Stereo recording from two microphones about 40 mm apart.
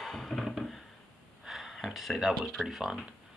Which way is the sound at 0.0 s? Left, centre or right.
Centre.